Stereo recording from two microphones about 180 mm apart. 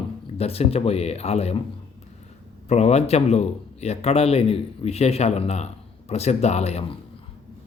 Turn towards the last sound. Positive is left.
turn(degrees=35)  # may be behind; listen again after turning